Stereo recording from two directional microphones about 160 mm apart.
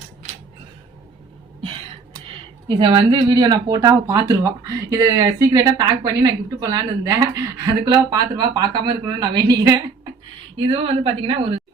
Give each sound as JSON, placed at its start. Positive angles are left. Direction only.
{"t": 2.6, "sound": "speech", "side_deg": -30}
{"t": 10.6, "sound": "a woman's voice", "side_deg": -35}